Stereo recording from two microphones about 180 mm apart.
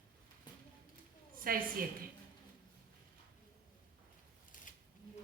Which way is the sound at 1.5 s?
55° right (ahead or behind).